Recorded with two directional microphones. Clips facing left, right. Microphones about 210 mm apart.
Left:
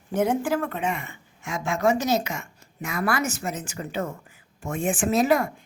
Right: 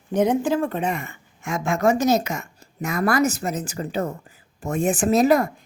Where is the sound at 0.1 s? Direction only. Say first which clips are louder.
Right 3 dB; 20° right (ahead or behind).